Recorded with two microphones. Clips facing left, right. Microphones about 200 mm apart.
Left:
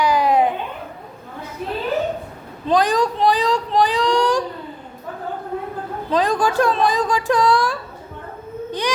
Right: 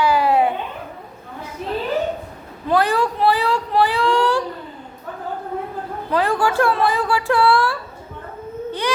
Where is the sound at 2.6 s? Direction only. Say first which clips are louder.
Left 1 dB; 15° left (ahead or behind).